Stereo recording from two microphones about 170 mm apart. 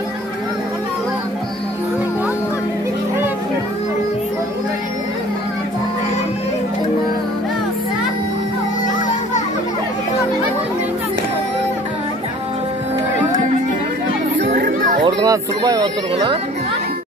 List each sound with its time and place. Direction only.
14.4 s music: 60° right (ahead or behind)
15.0 s speech: 20° right (ahead or behind)